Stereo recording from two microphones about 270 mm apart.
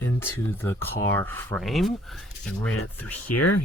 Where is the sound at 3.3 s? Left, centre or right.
Left.